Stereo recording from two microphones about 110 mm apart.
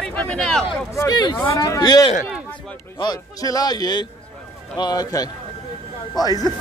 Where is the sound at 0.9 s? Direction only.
30° left (ahead or behind).